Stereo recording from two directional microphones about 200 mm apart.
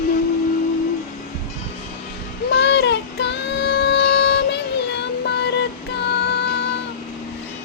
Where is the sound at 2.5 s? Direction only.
60° left (ahead or behind).